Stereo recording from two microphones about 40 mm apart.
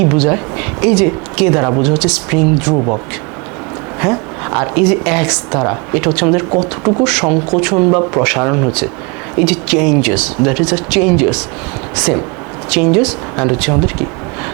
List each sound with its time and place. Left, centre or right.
0.0 s a woman's voice: centre
2.7 s speech: right
4.0 s a woman's voice: centre